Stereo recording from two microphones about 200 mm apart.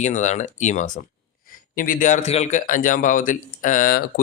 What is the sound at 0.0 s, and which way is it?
Speech, 35° left (ahead or behind).